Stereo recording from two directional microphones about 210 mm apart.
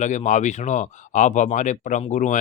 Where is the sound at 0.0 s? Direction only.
35° left (ahead or behind).